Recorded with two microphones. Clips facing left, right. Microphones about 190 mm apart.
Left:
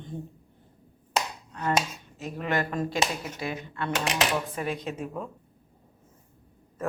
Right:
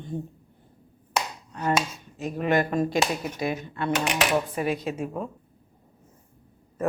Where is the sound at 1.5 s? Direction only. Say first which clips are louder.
Right 3 dB; 15° right (ahead or behind).